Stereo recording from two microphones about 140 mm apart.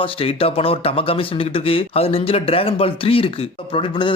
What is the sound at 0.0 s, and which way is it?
A man's voice, 40° left (ahead or behind).